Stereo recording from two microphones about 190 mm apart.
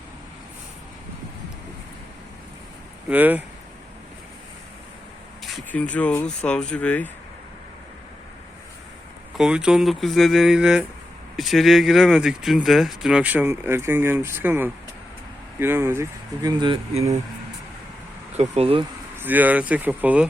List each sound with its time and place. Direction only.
3.1 s speech: 10° right (ahead or behind)
5.7 s speech: 5° left (ahead or behind)
9.4 s speech: 5° right (ahead or behind); by 17.2 s 20° right (ahead or behind)
18.3 s speech: 35° right (ahead or behind)
19.1 s speech: 10° right (ahead or behind)